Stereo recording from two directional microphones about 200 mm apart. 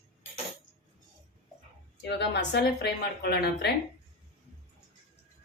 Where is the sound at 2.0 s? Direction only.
60° left (ahead or behind).